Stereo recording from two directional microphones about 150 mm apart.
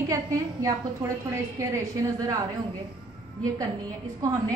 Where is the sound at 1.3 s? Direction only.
20° right (ahead or behind).